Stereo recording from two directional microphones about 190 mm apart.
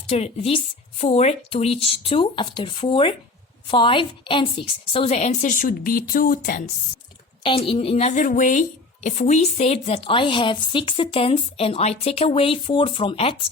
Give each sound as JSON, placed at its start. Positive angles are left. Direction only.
{"t": 0.1, "sound": "a woman's voice", "side_deg": 30}
{"t": 7.4, "sound": "a woman's voice", "side_deg": 30}